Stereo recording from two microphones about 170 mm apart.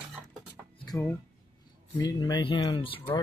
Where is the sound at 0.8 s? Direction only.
20° left (ahead or behind).